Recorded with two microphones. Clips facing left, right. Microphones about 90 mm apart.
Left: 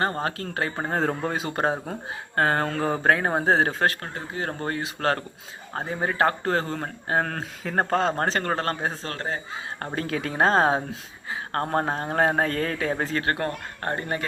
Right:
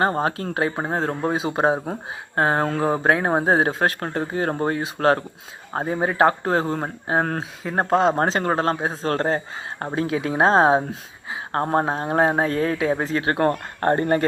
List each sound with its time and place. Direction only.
0.0 s speech: 20° right (ahead or behind)
0.9 s speech: 5° right (ahead or behind)
4.1 s speech: 40° right (ahead or behind)
5.8 s speech: 15° right (ahead or behind)
7.6 s speech: 10° right (ahead or behind)
8.9 s speech: 40° right (ahead or behind)
9.8 s speech: 15° right (ahead or behind)
13.4 s speech: 35° right (ahead or behind)